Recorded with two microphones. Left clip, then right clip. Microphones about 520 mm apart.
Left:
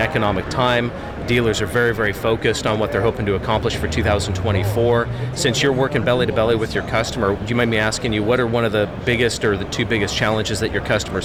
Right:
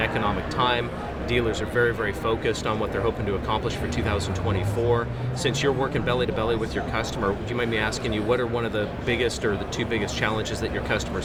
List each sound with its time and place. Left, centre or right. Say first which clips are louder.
0.0 s speech: left 6 dB; left